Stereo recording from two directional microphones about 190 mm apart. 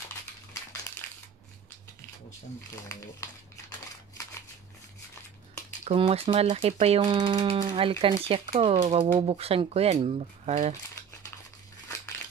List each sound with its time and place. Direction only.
2.9 s speech: 15° left (ahead or behind)
5.9 s speech: 30° right (ahead or behind)